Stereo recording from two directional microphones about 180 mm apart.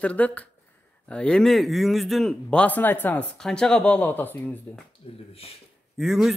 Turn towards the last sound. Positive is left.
turn(degrees=0)  # may be behind; listen again after turning